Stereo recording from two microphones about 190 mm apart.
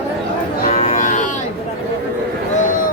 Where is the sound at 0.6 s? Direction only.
35° left (ahead or behind).